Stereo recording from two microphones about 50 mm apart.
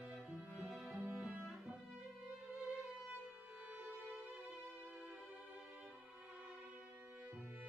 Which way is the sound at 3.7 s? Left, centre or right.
Right.